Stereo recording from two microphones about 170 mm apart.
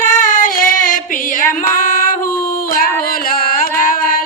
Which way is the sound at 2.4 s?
55° left (ahead or behind).